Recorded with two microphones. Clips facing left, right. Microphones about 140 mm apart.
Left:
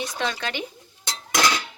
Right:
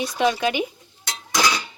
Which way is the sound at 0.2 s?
15° right (ahead or behind).